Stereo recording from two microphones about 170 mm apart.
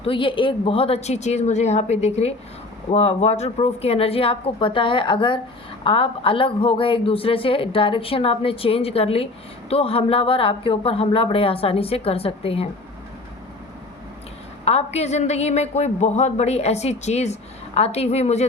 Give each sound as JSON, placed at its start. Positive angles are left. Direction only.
{"t": 0.0, "sound": "speech", "side_deg": 30}
{"t": 14.6, "sound": "speech", "side_deg": 35}